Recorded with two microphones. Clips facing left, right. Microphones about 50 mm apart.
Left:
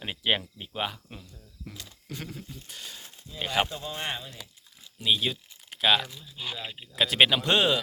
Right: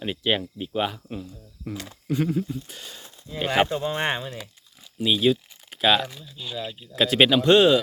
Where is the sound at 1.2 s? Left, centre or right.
Right.